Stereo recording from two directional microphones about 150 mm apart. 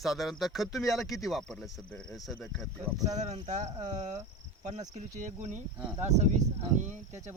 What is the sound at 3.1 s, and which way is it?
Speech, 50° right (ahead or behind).